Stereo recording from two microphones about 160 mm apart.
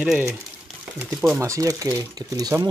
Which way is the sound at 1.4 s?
20° right (ahead or behind).